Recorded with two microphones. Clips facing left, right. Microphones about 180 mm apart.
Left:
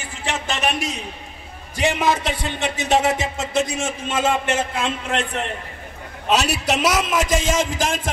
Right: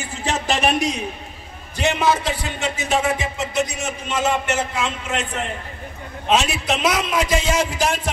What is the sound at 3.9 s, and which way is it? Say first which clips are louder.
Speech: left 1 dB; 50° left (ahead or behind).